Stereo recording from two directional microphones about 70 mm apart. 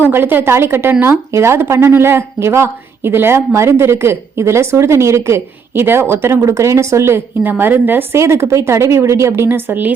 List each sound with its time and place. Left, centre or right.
0.0 s a woman's voice: right
7.6 s a woman's voice: right
8.2 s speech: right